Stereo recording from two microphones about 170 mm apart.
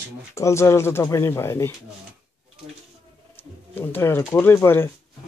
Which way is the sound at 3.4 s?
15° left (ahead or behind).